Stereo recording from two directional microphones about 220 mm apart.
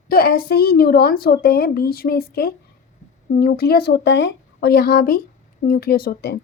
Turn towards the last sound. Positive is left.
turn(degrees=45)  # may be behind; listen again after turning